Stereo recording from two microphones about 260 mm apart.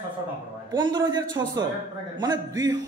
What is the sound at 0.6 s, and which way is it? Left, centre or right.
A man's voice, centre.